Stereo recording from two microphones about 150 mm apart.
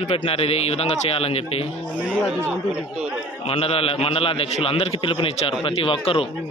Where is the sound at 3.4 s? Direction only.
40° left (ahead or behind).